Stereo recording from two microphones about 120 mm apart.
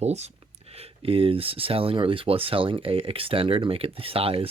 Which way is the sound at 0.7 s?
55° right (ahead or behind).